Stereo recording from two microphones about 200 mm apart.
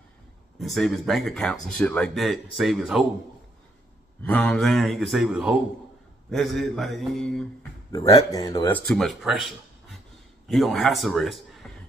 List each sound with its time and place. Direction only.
0.6 s speech: centre (ahead or behind)
4.2 s speech: 5° left (ahead or behind)
7.9 s speech: 15° left (ahead or behind)
8.7 s a man's voice: 5° left (ahead or behind)